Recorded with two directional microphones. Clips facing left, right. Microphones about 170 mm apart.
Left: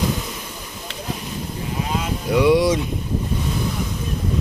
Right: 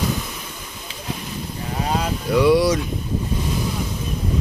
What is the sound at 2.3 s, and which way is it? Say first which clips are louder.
Speech: even; 15° left (ahead or behind).